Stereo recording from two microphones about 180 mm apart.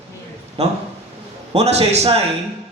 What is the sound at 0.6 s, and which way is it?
A man's voice, 35° right (ahead or behind).